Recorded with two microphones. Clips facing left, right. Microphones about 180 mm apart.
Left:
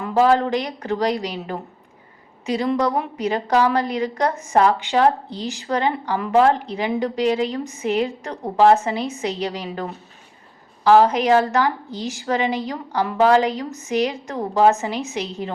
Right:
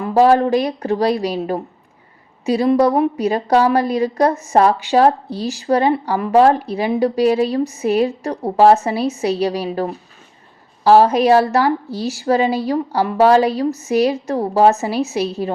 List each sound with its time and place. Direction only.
0.0 s a woman's voice: 35° right (ahead or behind)